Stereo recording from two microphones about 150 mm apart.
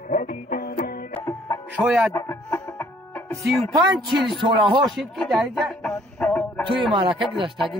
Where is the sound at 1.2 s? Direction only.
20° left (ahead or behind).